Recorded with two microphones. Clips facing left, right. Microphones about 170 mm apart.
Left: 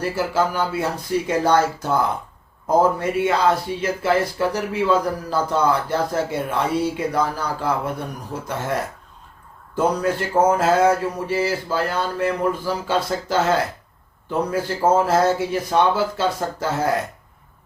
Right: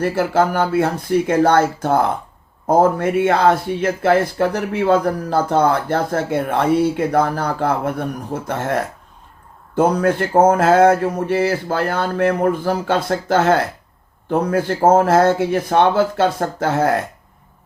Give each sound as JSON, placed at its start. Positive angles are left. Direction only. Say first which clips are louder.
{"t": 0.0, "sound": "speech", "louder": "right 4 dB", "side_deg": -55}
{"t": 9.7, "sound": "speech", "louder": "right 5 dB", "side_deg": -55}